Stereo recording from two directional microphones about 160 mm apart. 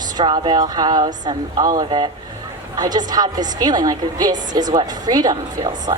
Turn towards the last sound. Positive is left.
turn(degrees=-25)  # may be behind; listen again after turning